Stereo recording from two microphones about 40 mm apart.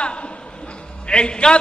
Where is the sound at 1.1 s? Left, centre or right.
Left.